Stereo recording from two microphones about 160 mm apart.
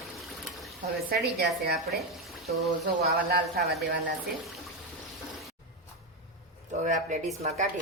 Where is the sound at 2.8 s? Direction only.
75° right (ahead or behind).